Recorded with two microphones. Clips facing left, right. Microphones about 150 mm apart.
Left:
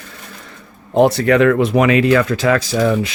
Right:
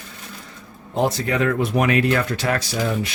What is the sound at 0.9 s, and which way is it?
Speech, 65° left (ahead or behind).